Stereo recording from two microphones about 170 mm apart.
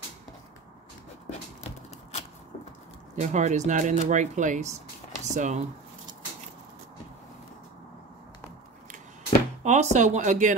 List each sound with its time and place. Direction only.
3.2 s speech: 45° right (ahead or behind)
9.6 s speech: 45° right (ahead or behind)